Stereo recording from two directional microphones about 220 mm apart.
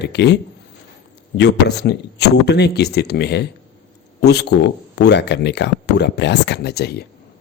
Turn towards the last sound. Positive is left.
turn(degrees=50)  # may be behind; listen again after turning